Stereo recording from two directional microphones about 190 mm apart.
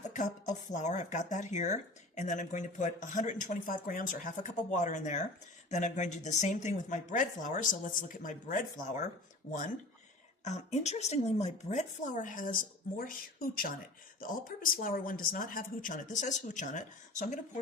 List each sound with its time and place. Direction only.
0.0 s speech: 40° left (ahead or behind)
10.4 s speech: 35° left (ahead or behind)